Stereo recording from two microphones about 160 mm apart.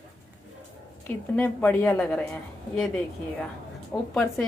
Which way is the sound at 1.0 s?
10° left (ahead or behind).